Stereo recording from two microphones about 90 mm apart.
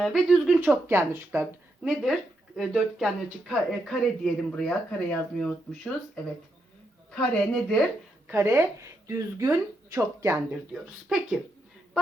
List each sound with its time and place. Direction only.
0.0 s speech: 5° right (ahead or behind)
0.6 s speech: 20° right (ahead or behind)
1.8 s speech: 5° right (ahead or behind)
8.3 s speech: 25° right (ahead or behind)